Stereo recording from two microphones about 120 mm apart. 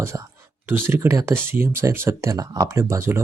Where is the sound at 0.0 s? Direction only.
20° right (ahead or behind).